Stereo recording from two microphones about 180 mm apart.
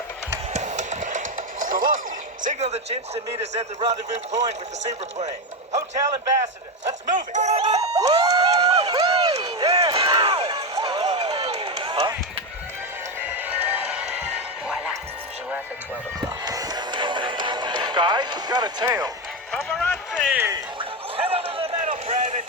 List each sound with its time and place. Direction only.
0.5 s music: 40° right (ahead or behind)
2.4 s speech: 40° right (ahead or behind)
7.3 s speech: 35° right (ahead or behind)
7.7 s speech: 20° right (ahead or behind)
9.4 s run: 20° right (ahead or behind)
11.7 s music: 25° right (ahead or behind)
13.2 s music: 10° right (ahead or behind)
16.5 s music: 20° right (ahead or behind)
19.5 s run: centre (ahead or behind)
20.3 s a sound: 10° right (ahead or behind)
20.7 s a sound: 30° right (ahead or behind)
22.0 s a sound: 40° right (ahead or behind)